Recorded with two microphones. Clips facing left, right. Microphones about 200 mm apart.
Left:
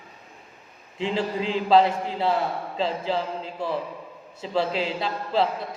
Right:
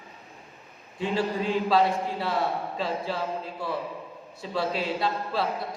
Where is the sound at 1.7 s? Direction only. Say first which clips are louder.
Left 7 dB; 25° left (ahead or behind).